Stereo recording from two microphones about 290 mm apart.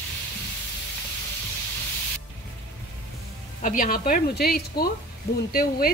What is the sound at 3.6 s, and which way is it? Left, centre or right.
A woman's voice, left.